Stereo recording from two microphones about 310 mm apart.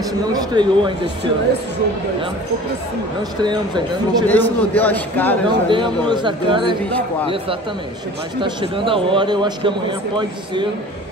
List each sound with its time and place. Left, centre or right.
0.3 s a man's voice: centre
3.3 s a man's voice: centre
4.3 s a man's voice: centre
5.5 s a man's voice: centre
6.9 s a man's voice: centre
8.4 s a man's voice: centre